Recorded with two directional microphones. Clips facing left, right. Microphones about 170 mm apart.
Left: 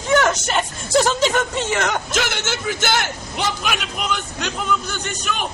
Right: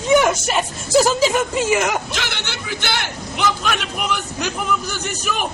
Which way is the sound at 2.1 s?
45° left (ahead or behind).